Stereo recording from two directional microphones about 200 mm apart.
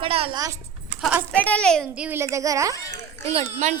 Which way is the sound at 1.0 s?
5° right (ahead or behind).